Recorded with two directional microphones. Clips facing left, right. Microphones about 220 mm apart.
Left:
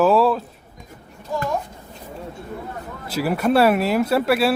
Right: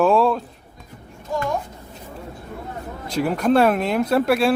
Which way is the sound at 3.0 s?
5° left (ahead or behind).